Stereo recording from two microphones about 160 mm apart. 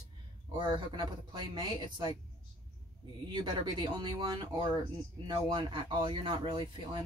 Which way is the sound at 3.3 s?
25° right (ahead or behind).